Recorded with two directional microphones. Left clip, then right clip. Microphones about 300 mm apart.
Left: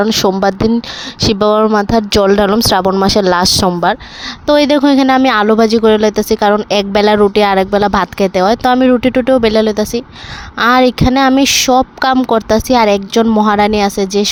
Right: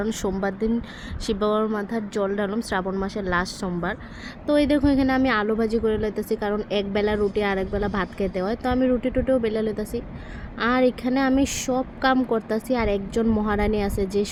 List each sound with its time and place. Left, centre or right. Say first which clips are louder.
0.0 s speech: left 15 dB; left